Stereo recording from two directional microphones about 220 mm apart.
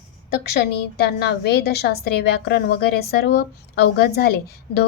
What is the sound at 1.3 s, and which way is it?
A woman's voice, 50° left (ahead or behind).